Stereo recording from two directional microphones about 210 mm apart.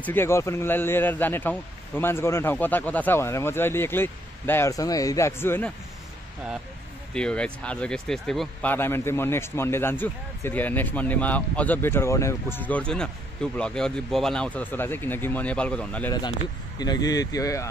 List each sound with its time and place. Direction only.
0.0 s speech: 10° left (ahead or behind)
7.2 s speech: 5° left (ahead or behind)
16.1 s speech: 20° left (ahead or behind)